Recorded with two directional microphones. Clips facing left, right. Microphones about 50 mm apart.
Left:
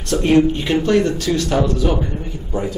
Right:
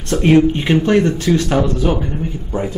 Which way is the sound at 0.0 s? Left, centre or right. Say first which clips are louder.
Right 2 dB; right.